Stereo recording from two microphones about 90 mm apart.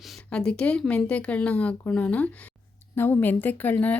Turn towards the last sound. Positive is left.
turn(degrees=15)  # may be behind; listen again after turning